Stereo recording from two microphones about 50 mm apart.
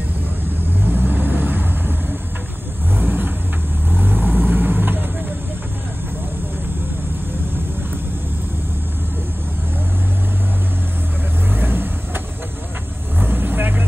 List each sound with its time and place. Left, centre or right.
0.8 s vehicle: right
3.0 s vehicle: right
11.5 s vehicle: right
13.2 s vehicle: right